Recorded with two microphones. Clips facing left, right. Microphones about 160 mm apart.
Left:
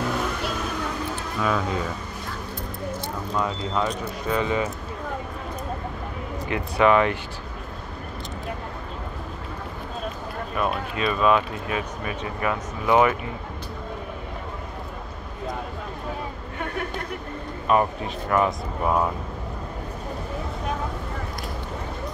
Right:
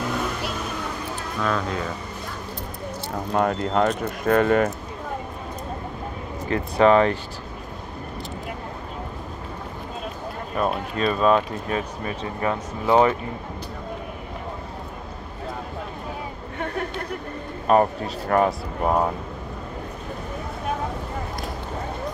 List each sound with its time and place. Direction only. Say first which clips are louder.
1.4 s speech: even; 5° left (ahead or behind)
3.3 s speech: right 5 dB; 55° right (ahead or behind)
6.4 s speech: right 2 dB; 35° right (ahead or behind)
10.5 s speech: right 2 dB; 35° right (ahead or behind)
17.6 s speech: right 3 dB; 40° right (ahead or behind)